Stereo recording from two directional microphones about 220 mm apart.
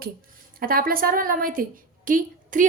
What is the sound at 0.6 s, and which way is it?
A woman's voice, 40° right (ahead or behind).